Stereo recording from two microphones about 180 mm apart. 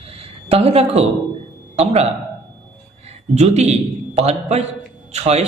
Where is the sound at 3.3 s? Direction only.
40° right (ahead or behind).